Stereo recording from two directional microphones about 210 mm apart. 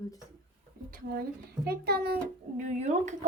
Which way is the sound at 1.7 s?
50° right (ahead or behind).